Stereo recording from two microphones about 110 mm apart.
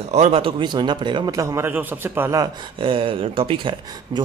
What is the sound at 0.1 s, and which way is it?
Speech, 90° right.